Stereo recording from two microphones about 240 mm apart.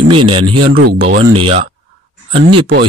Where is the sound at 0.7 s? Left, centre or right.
Right.